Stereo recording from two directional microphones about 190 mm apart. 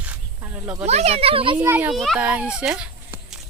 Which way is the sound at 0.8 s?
35° right (ahead or behind).